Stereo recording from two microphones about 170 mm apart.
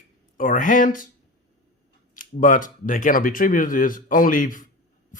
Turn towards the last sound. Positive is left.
turn(degrees=50)  # may be behind; listen again after turning